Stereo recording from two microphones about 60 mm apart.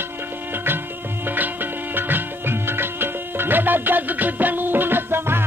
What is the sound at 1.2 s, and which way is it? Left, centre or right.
Music, right.